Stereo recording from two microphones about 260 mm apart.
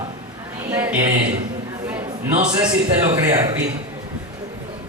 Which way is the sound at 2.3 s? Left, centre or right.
Centre.